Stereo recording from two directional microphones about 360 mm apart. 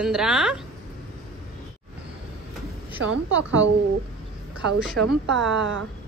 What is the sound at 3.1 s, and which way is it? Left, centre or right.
Speech, right.